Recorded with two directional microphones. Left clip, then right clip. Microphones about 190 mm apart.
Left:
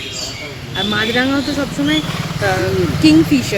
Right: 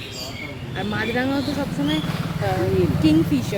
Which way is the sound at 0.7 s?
45° left (ahead or behind).